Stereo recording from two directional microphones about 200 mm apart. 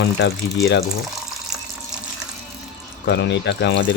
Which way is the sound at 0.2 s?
60° left (ahead or behind).